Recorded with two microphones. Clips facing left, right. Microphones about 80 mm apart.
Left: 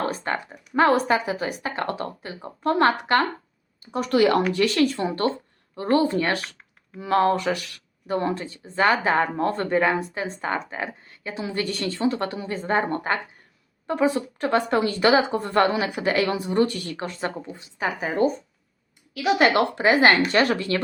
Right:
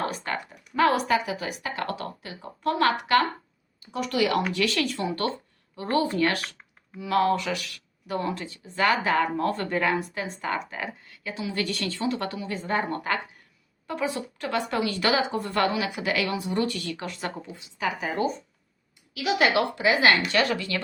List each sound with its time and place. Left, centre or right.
0.1 s speech: left